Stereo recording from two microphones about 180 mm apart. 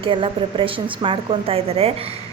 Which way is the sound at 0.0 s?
30° right (ahead or behind).